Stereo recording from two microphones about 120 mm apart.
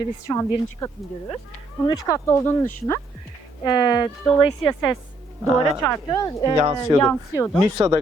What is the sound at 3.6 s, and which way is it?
Speech, 35° left (ahead or behind).